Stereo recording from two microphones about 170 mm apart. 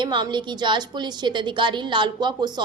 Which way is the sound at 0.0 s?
25° right (ahead or behind).